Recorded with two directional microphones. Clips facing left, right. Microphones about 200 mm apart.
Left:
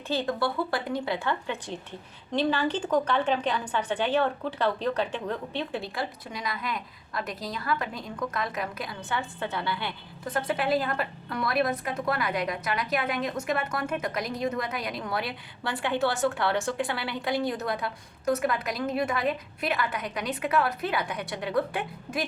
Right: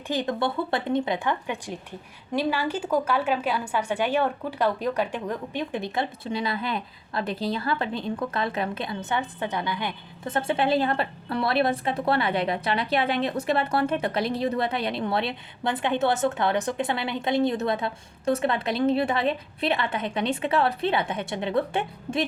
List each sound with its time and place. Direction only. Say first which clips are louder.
0.1 s a woman's voice: right 2 dB; 20° right (ahead or behind)